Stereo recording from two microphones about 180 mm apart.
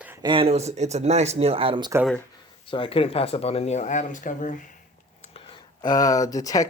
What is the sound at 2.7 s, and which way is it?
Speech, 30° left (ahead or behind).